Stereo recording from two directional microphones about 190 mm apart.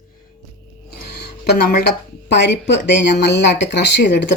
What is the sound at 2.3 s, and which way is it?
Speech, 65° left (ahead or behind).